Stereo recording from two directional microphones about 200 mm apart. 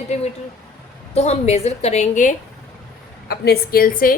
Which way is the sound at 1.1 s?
30° left (ahead or behind).